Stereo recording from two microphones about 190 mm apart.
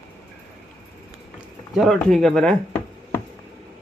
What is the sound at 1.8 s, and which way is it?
Speech, centre (ahead or behind).